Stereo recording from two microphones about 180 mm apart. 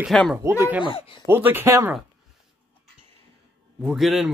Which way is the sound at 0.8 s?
30° left (ahead or behind).